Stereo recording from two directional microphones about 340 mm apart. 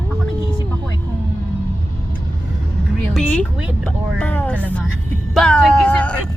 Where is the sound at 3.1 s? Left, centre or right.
Centre.